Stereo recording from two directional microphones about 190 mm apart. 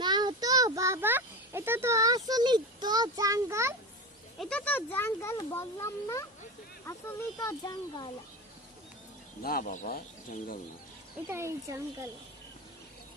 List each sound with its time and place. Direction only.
0.0 s a sound: 25° right (ahead or behind)
4.4 s a child's voice: 5° left (ahead or behind); by 8.1 s 20° left (ahead or behind)
9.4 s speech: 50° left (ahead or behind)
11.3 s speech: 15° right (ahead or behind)